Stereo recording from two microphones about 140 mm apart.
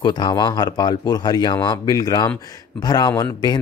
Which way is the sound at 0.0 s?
30° left (ahead or behind).